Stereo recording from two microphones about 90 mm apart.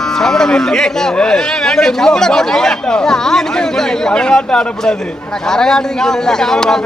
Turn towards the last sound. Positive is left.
turn(degrees=5)  # may be behind; listen again after turning